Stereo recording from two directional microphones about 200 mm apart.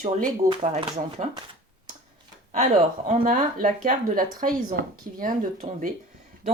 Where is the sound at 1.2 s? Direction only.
25° right (ahead or behind).